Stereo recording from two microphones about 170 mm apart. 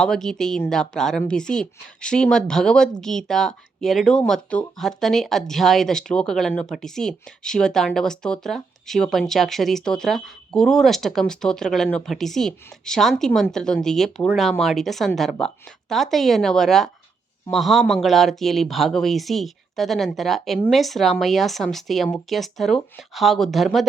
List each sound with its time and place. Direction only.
0.0 s speech: 5° left (ahead or behind)